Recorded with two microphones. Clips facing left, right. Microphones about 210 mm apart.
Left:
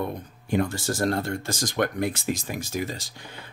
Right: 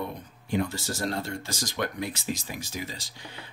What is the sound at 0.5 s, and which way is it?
Speech, 50° left (ahead or behind).